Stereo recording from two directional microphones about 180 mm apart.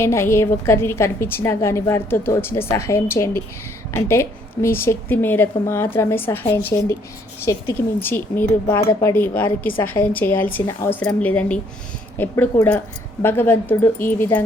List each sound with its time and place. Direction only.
0.0 s a woman's voice: 15° left (ahead or behind)